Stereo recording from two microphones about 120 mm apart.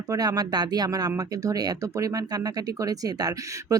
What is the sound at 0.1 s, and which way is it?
Speech, 30° right (ahead or behind).